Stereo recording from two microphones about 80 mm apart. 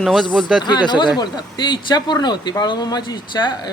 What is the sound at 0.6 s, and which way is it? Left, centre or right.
Speech, left.